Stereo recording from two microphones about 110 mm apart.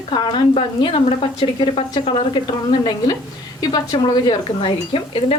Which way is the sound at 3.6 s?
40° left (ahead or behind).